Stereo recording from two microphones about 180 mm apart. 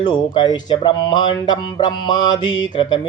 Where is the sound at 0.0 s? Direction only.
25° left (ahead or behind).